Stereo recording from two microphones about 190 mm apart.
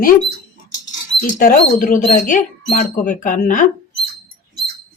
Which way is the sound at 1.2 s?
45° left (ahead or behind).